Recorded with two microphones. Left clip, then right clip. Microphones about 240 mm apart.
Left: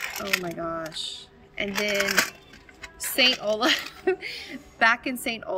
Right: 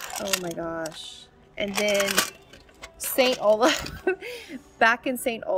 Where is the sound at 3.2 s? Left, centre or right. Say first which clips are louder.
Right 2 dB; centre.